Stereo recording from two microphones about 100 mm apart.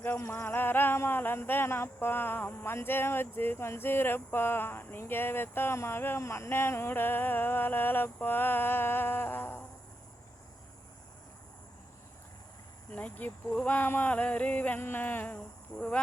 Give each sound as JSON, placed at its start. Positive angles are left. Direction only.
{"t": 0.3, "sound": "a sound", "side_deg": 15}
{"t": 12.9, "sound": "speech", "side_deg": 15}
{"t": 15.7, "sound": "speech", "side_deg": 30}